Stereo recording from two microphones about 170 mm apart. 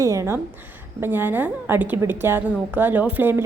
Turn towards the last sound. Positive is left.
turn(degrees=-10)  # may be behind; listen again after turning